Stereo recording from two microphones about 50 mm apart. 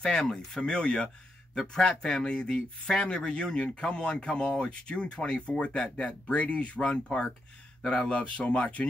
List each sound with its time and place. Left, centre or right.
0.0 s speech: centre